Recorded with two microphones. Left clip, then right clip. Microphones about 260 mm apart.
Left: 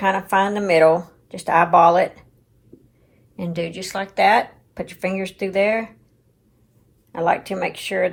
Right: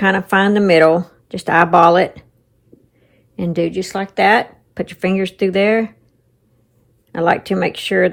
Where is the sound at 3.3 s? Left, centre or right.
Right.